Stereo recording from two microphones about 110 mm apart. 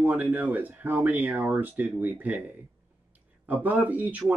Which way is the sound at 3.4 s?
15° right (ahead or behind).